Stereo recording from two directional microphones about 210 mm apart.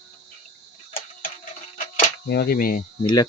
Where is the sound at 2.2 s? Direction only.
50° left (ahead or behind).